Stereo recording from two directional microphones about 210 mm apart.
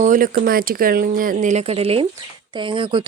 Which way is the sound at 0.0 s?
40° right (ahead or behind).